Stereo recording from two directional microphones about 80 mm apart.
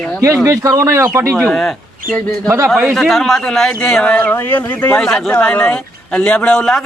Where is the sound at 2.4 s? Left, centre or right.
Right.